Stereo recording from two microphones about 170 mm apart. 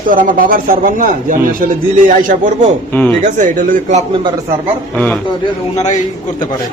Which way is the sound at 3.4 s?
50° right (ahead or behind).